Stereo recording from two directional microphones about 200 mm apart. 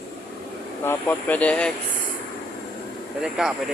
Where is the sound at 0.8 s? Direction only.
10° left (ahead or behind).